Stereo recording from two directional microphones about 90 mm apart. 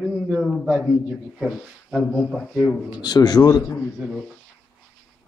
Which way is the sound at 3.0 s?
50° left (ahead or behind).